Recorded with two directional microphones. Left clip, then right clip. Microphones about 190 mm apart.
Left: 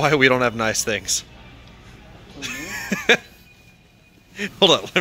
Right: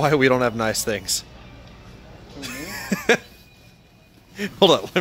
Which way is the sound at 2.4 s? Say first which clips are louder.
Left 3 dB; 10° right (ahead or behind).